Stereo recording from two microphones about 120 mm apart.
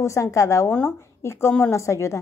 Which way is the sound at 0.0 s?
25° left (ahead or behind).